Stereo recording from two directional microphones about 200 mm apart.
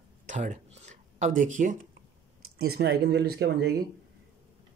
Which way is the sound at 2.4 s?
50° right (ahead or behind).